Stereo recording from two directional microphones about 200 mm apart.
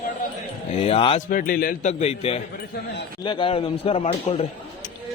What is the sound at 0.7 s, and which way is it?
Speech, 30° left (ahead or behind).